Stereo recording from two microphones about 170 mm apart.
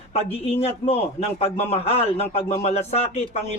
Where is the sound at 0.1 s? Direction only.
35° left (ahead or behind).